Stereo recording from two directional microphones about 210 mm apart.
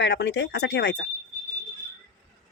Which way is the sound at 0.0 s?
55° left (ahead or behind).